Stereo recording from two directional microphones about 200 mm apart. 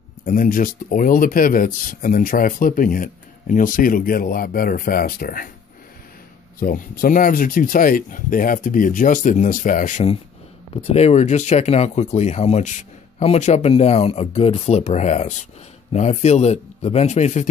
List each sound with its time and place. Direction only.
0.2 s speech: 45° left (ahead or behind)
6.6 s speech: 45° left (ahead or behind)